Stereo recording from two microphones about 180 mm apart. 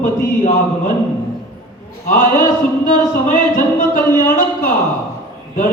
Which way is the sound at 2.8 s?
45° left (ahead or behind).